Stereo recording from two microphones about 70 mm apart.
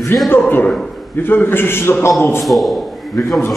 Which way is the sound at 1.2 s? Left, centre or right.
Left.